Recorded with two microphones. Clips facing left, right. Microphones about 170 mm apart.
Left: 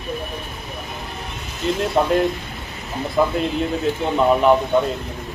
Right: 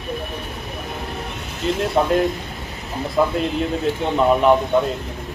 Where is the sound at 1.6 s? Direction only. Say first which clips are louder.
Even; centre (ahead or behind).